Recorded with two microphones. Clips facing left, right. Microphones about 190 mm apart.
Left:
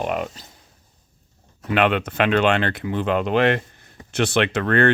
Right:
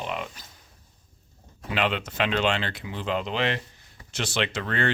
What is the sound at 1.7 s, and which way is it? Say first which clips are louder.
Speech: left 7 dB; 60° left (ahead or behind).